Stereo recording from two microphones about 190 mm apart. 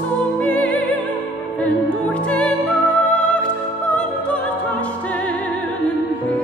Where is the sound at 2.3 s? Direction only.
5° left (ahead or behind).